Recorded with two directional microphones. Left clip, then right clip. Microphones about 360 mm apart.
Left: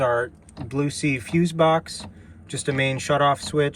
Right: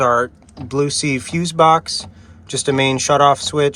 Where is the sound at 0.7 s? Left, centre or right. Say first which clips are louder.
Right 7 dB; right.